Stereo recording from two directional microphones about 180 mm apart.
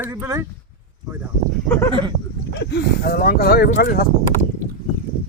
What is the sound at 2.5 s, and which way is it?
Speech, 70° left (ahead or behind).